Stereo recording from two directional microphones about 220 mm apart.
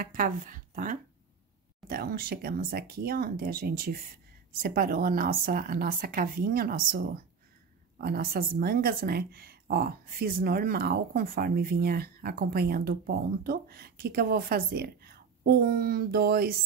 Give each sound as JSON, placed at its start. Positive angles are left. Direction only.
{"t": 0.0, "sound": "speech", "side_deg": -40}